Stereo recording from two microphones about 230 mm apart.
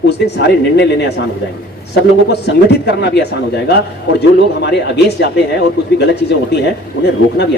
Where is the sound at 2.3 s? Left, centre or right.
Left.